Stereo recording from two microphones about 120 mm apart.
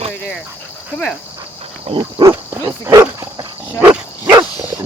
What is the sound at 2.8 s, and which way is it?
Dog, 30° right (ahead or behind).